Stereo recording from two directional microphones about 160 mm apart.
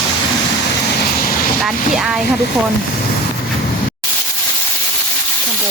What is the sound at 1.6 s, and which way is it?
Speech, centre (ahead or behind).